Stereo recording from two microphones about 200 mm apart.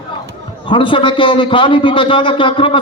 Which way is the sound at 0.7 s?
25° left (ahead or behind).